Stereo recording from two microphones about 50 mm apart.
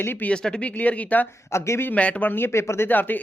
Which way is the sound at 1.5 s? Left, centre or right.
Left.